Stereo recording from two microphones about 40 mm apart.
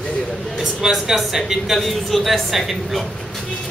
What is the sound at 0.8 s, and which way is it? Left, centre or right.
Speech, centre.